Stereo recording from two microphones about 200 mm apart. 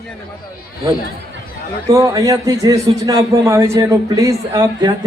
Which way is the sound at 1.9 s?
15° right (ahead or behind).